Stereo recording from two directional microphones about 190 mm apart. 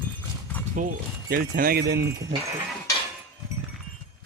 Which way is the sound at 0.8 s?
45° right (ahead or behind).